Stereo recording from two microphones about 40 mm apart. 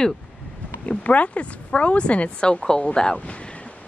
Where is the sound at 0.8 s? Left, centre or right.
Left; by 2.9 s centre.